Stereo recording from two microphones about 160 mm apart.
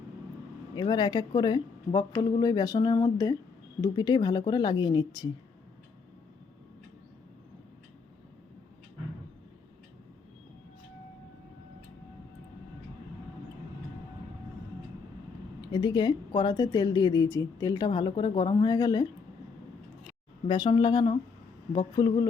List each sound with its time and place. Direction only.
0.8 s speech: 25° left (ahead or behind)
15.6 s speech: 25° left (ahead or behind)
20.5 s speech: 30° left (ahead or behind)